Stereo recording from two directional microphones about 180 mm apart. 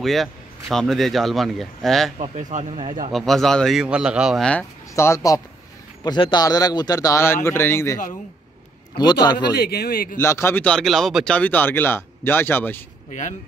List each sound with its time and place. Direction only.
0.0 s speech: centre (ahead or behind)
2.1 s speech: 35° right (ahead or behind)
3.1 s speech: centre (ahead or behind); by 9.5 s 25° left (ahead or behind)
9.6 s a man's voice: 60° left (ahead or behind)
10.2 s speech: 15° left (ahead or behind)